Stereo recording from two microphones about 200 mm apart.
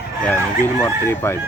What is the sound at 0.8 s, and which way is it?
Speech, 10° left (ahead or behind).